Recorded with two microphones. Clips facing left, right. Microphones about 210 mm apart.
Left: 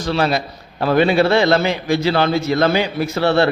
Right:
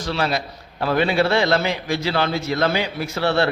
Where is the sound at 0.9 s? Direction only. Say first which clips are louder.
Left 5 dB; 25° left (ahead or behind).